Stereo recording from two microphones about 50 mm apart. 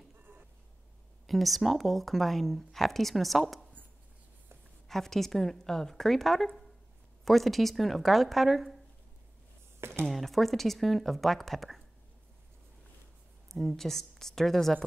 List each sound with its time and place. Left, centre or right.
1.2 s speech: centre
4.8 s a woman's voice: centre
9.8 s a sound: right
10.0 s speech: centre
13.5 s a woman's voice: centre